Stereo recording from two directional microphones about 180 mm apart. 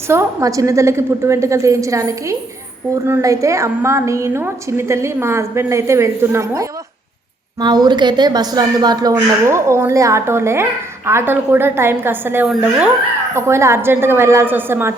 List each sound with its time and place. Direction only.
0.1 s a woman's voice: 15° right (ahead or behind)